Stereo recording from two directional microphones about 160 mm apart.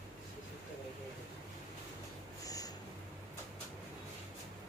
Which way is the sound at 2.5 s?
20° left (ahead or behind).